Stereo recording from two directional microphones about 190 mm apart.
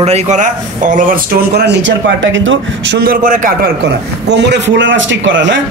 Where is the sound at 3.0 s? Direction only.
50° right (ahead or behind).